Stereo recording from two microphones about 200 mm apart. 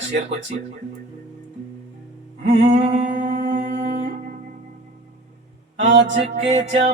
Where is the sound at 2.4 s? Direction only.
35° right (ahead or behind).